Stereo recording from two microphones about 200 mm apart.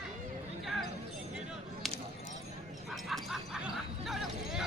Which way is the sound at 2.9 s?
Centre (ahead or behind).